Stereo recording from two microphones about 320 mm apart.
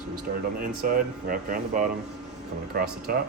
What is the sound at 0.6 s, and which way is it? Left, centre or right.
Speech, right.